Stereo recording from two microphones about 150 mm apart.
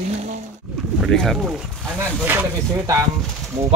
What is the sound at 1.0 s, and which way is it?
Speech, 5° left (ahead or behind).